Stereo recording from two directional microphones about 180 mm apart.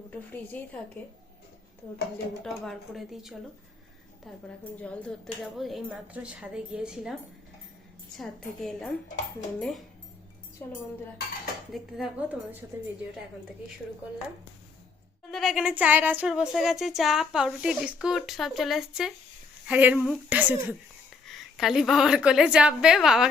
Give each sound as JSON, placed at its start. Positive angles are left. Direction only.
{"t": 0.1, "sound": "a woman's voice", "side_deg": 10}
{"t": 2.4, "sound": "speech", "side_deg": 0}
{"t": 4.8, "sound": "speech", "side_deg": 5}
{"t": 10.6, "sound": "a woman's voice", "side_deg": 15}
{"t": 11.7, "sound": "speech", "side_deg": 0}
{"t": 15.3, "sound": "a woman's voice", "side_deg": 0}